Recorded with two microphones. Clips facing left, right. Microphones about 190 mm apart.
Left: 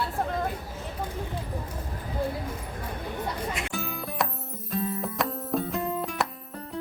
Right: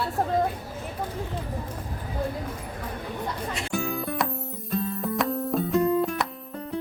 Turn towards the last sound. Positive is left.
turn(degrees=0)  # may be behind; listen again after turning